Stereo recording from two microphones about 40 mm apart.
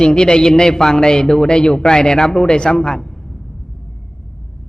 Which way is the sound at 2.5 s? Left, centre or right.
Left.